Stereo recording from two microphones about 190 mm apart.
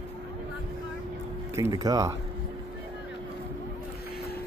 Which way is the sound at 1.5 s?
15° right (ahead or behind).